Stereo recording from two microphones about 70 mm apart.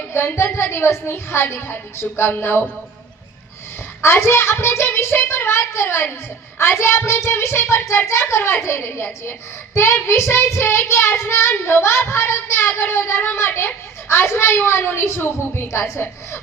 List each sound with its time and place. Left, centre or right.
0.1 s speech: left
4.0 s speech: left